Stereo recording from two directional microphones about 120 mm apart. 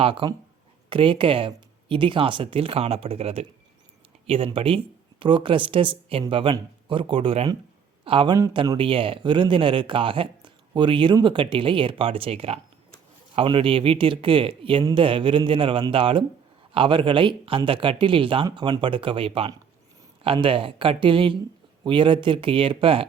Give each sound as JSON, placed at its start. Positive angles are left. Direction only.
{"t": 0.0, "sound": "speech", "side_deg": -45}